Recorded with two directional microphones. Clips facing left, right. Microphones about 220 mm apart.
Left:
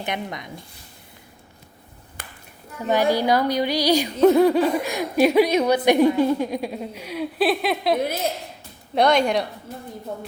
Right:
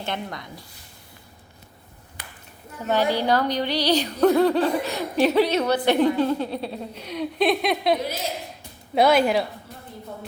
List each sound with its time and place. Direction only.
0.0 s speech: 15° left (ahead or behind)
2.2 s clapping: 45° left (ahead or behind)
2.9 s speech: 10° left (ahead or behind)
9.0 s speech: 5° right (ahead or behind)